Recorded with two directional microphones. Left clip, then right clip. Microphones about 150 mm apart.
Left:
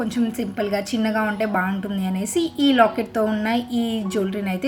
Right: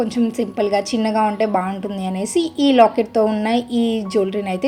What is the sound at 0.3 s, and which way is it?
A woman's voice, 20° right (ahead or behind).